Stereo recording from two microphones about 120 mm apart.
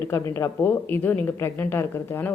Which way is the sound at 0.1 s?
25° left (ahead or behind).